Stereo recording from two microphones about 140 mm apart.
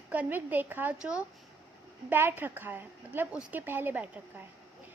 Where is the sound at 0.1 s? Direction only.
10° right (ahead or behind).